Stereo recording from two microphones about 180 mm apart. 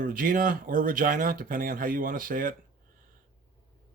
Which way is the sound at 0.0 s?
50° right (ahead or behind).